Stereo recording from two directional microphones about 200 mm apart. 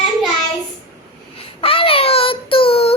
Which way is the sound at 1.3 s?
30° left (ahead or behind).